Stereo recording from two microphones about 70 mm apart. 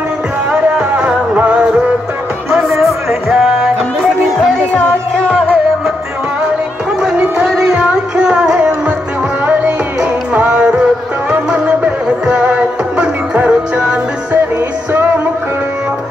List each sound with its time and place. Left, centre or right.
0.5 s music: centre
2.8 s music: centre
7.4 s music: centre
7.7 s music: centre
10.3 s music: centre